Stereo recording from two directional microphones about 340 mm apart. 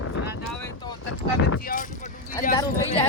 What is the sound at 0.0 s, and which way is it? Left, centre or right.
Wind noise, left.